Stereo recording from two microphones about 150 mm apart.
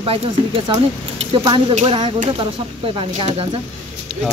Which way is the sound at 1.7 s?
45° right (ahead or behind).